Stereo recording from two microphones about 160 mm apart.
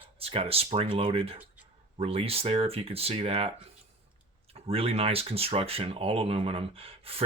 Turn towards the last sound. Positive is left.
turn(degrees=-35)  # may be behind; listen again after turning